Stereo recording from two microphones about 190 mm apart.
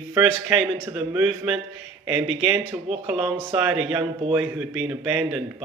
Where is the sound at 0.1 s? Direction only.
10° right (ahead or behind).